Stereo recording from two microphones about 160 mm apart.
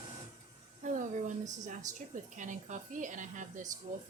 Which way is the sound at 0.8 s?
55° right (ahead or behind).